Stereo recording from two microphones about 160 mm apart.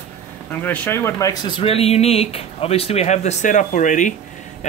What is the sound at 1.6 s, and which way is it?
Speech, 40° left (ahead or behind).